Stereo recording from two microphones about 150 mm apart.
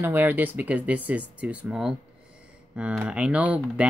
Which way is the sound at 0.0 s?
10° right (ahead or behind).